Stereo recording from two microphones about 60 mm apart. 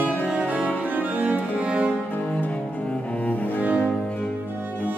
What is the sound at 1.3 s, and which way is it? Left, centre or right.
Cello, centre.